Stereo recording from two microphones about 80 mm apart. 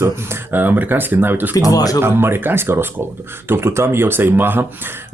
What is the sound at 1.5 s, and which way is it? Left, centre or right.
Speech, left.